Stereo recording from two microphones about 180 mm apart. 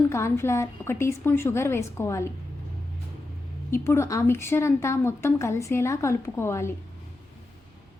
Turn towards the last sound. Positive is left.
turn(degrees=15)  # may be behind; listen again after turning